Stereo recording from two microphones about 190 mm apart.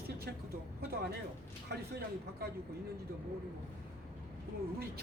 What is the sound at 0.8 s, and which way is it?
Speech, 55° right (ahead or behind).